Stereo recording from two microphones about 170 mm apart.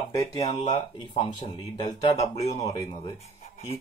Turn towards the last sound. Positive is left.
turn(degrees=35)  # may be behind; listen again after turning